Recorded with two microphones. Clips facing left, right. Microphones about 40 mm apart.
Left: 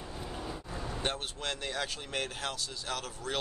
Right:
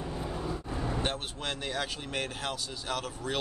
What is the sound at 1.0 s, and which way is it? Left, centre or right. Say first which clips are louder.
Speech: right 1 dB; centre.